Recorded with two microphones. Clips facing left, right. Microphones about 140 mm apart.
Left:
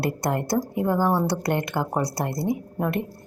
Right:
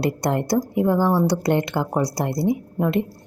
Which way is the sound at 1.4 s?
20° right (ahead or behind).